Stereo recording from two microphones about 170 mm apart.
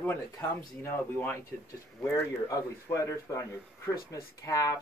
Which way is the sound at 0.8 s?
15° left (ahead or behind).